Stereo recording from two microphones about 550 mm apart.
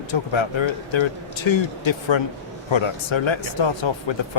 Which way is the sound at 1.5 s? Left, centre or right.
Left.